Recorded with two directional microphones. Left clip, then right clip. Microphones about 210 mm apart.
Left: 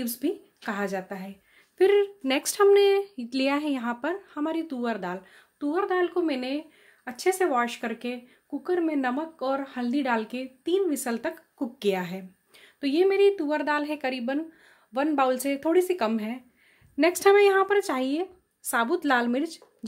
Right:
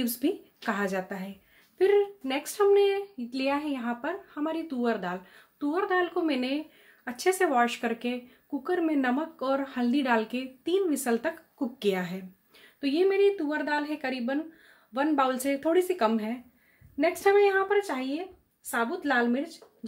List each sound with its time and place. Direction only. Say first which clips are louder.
0.0 s a woman's voice: right 1 dB; 10° left (ahead or behind)
1.8 s speech: left 2 dB; 35° left (ahead or behind)
16.9 s a woman's voice: left 3 dB; 45° left (ahead or behind)